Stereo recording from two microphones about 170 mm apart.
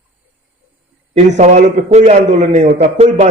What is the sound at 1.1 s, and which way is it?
A man's voice, 45° right (ahead or behind).